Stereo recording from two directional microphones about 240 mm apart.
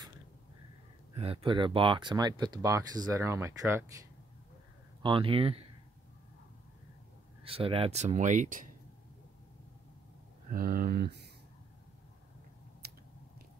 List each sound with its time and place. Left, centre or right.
1.1 s speech: right
5.0 s speech: right
7.4 s speech: right
10.5 s speech: right